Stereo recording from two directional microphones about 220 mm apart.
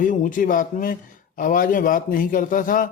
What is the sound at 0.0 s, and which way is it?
A man's voice, 35° left (ahead or behind).